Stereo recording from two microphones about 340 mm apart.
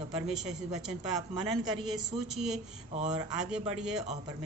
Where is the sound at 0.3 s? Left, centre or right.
Centre.